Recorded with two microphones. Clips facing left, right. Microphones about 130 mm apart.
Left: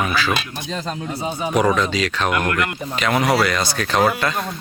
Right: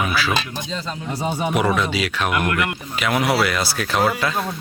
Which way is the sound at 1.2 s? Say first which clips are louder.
Right 3 dB; 60° right (ahead or behind).